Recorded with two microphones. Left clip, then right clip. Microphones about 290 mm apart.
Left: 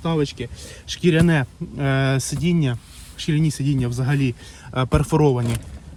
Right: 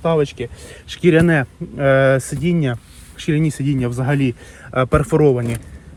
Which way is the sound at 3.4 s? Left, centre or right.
Centre.